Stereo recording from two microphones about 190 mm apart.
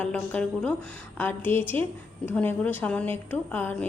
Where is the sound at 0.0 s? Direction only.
10° left (ahead or behind).